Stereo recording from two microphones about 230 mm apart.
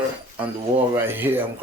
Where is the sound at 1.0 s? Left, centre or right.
Centre.